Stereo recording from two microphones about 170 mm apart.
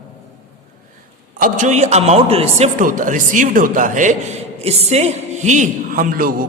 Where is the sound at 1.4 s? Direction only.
50° right (ahead or behind).